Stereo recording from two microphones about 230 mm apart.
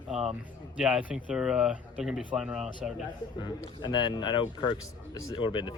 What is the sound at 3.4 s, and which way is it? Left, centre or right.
Speech, centre.